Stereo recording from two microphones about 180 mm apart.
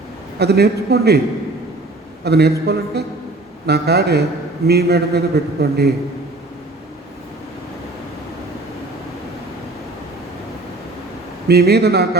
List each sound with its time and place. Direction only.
0.3 s a man's voice: 65° right (ahead or behind)
2.2 s a man's voice: 65° right (ahead or behind)
11.4 s a man's voice: 65° right (ahead or behind)